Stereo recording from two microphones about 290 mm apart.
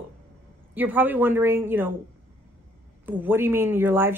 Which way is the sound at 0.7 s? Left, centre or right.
Centre.